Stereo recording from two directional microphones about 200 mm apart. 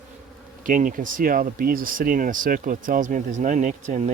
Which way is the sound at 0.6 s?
40° right (ahead or behind).